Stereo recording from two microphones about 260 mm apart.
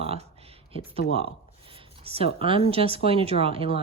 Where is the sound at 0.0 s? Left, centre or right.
Right.